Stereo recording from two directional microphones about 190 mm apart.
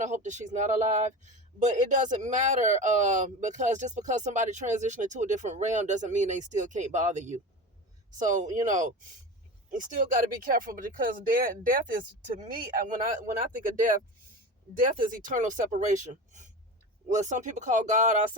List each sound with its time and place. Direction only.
0.0 s speech: 40° right (ahead or behind)
15.0 s speech: 45° right (ahead or behind)